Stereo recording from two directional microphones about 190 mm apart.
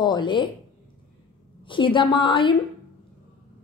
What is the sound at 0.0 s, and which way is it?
Speech, 25° left (ahead or behind).